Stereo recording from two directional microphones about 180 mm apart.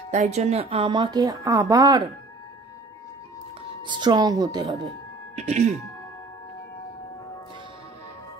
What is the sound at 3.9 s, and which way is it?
Speech, 25° right (ahead or behind).